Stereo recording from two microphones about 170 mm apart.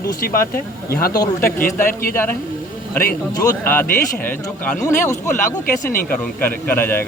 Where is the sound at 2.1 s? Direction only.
15° left (ahead or behind).